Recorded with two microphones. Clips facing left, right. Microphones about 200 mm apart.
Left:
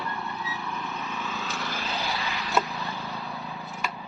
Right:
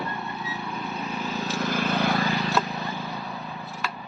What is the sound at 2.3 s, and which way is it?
Vehicle, 40° right (ahead or behind).